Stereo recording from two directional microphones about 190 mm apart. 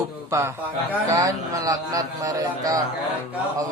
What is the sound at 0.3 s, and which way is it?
A man's voice, 15° right (ahead or behind).